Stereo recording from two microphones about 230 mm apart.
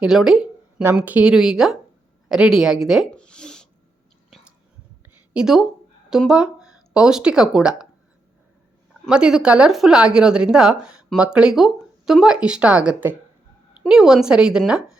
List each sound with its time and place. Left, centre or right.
0.0 s a woman's voice: centre
2.3 s a sound: centre
4.3 s whispering: centre
5.3 s speech: centre
6.6 s a sound: right
6.9 s speech: centre
8.9 s speech: centre